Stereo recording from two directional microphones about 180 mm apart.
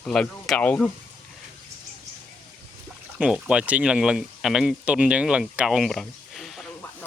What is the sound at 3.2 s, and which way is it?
Speech, 5° right (ahead or behind).